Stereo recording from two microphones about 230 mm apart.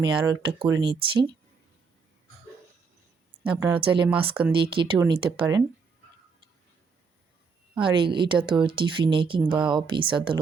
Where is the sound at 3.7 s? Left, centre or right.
Right.